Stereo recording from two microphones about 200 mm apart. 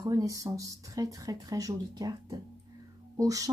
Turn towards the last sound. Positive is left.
turn(degrees=-15)  # may be behind; listen again after turning